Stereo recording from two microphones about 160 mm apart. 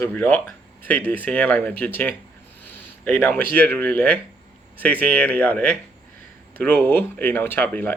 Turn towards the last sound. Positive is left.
turn(degrees=10)  # may be behind; listen again after turning